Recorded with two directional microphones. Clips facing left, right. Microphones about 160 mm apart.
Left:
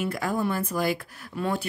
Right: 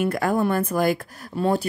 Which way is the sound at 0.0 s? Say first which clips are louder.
Right 5 dB; 55° right (ahead or behind).